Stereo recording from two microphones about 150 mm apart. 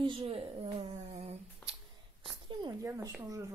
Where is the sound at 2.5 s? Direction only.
30° right (ahead or behind).